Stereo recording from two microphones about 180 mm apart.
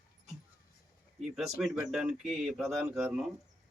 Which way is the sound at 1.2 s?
Centre (ahead or behind).